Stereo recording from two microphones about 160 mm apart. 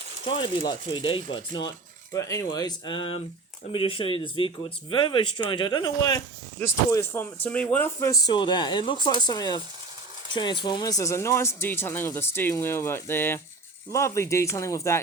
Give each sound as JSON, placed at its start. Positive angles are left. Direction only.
{"t": 0.3, "sound": "speech", "side_deg": 30}
{"t": 2.1, "sound": "speech", "side_deg": 20}
{"t": 8.3, "sound": "speech", "side_deg": 30}